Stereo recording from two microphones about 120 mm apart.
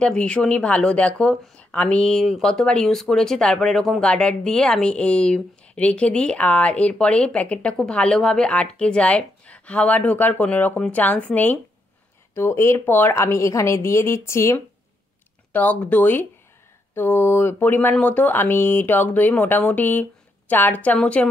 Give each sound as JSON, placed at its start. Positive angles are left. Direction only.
{"t": 0.0, "sound": "a woman's voice", "side_deg": 10}
{"t": 15.5, "sound": "speech", "side_deg": 10}